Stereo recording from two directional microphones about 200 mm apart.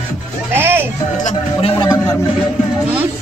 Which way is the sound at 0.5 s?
10° right (ahead or behind).